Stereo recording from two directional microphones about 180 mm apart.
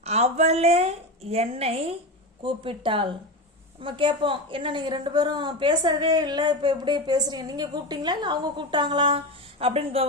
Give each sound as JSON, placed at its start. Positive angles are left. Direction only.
{"t": 0.0, "sound": "a woman's voice", "side_deg": -35}